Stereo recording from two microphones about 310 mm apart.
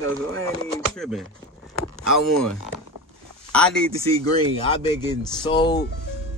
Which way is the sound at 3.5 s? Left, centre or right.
Centre.